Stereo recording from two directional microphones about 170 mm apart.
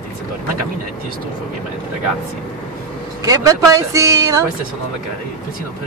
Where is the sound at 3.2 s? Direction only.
20° right (ahead or behind).